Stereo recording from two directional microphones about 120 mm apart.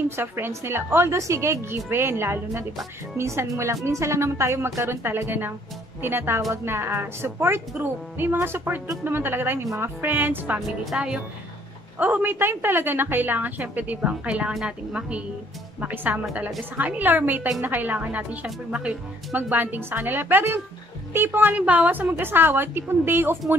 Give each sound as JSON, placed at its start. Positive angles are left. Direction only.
{"t": 0.1, "sound": "a woman's voice", "side_deg": -20}